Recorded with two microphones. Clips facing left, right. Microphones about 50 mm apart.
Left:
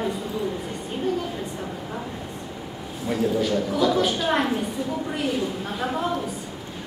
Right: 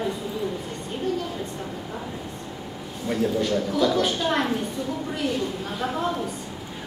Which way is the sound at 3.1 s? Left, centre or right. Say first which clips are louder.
Left 1 dB; centre.